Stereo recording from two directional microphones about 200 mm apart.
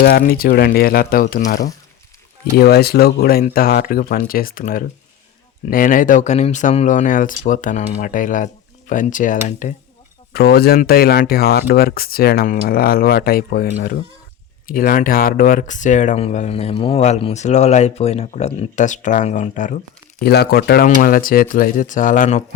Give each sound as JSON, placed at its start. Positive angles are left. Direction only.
{"t": 0.0, "sound": "speech", "side_deg": 50}
{"t": 2.6, "sound": "speech", "side_deg": 50}
{"t": 10.3, "sound": "speech", "side_deg": 50}
{"t": 20.2, "sound": "speech", "side_deg": 55}